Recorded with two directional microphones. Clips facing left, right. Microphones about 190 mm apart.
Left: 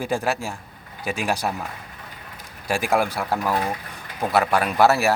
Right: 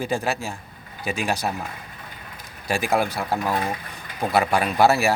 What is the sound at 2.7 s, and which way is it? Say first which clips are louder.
Speech: left 1 dB; 10° left (ahead or behind).